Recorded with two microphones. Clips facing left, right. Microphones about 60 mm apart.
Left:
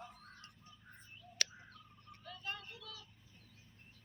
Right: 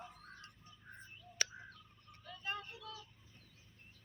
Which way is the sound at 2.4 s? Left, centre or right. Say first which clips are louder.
Right 4 dB; right.